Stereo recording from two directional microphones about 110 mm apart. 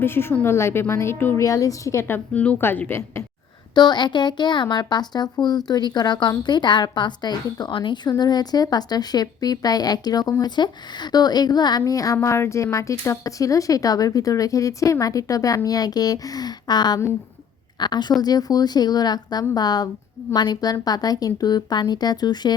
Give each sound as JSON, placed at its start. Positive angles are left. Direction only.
{"t": 0.0, "sound": "a woman's voice", "side_deg": 20}
{"t": 3.8, "sound": "speech", "side_deg": 40}